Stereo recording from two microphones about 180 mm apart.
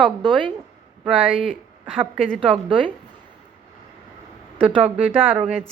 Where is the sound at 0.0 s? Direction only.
25° right (ahead or behind).